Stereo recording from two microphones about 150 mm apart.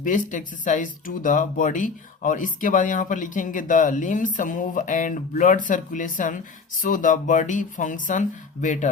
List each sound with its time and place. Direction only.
0.0 s speech: 60° left (ahead or behind)